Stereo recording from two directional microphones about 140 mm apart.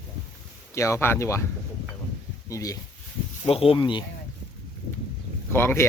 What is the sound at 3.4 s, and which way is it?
Speech, 45° left (ahead or behind).